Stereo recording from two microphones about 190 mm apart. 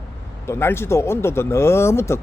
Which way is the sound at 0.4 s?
15° left (ahead or behind).